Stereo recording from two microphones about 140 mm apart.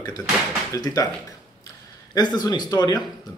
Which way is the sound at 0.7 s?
25° left (ahead or behind).